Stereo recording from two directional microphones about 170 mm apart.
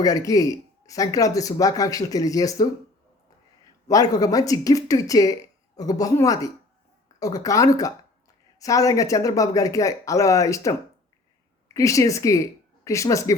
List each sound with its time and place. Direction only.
0.0 s speech: 20° left (ahead or behind)
3.8 s speech: 20° left (ahead or behind)